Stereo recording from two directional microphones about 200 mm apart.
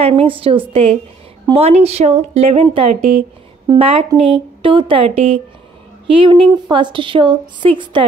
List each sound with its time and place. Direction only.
0.0 s a woman's voice: 25° right (ahead or behind)